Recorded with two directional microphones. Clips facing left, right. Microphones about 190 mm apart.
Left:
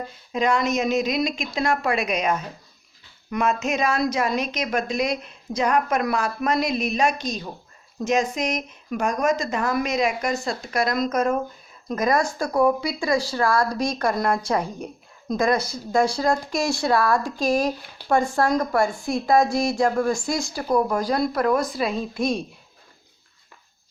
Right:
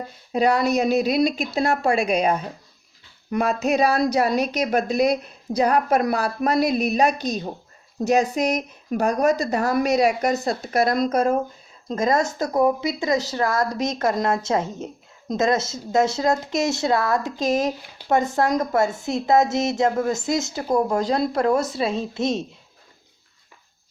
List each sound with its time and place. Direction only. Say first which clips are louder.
0.3 s a woman's voice: right 3 dB; 35° right (ahead or behind)